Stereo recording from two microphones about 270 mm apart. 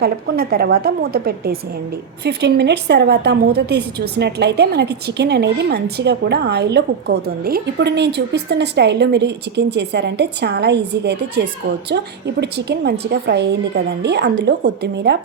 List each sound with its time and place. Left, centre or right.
0.0 s a woman's voice: right